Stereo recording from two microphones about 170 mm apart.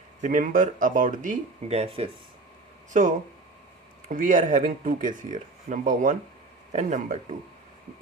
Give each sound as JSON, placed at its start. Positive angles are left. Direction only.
{"t": 0.2, "sound": "speech", "side_deg": -50}